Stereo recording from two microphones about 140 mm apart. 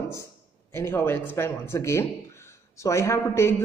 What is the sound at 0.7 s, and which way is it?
Speech, 15° left (ahead or behind).